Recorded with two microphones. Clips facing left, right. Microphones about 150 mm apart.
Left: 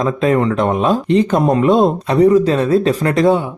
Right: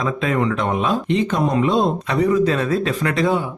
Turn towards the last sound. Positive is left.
turn(degrees=40)  # may be behind; listen again after turning